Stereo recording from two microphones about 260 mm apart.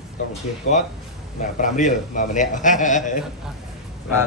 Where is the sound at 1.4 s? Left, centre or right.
Left.